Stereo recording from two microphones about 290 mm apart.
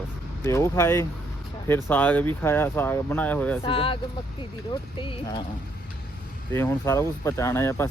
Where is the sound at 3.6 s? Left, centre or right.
Centre.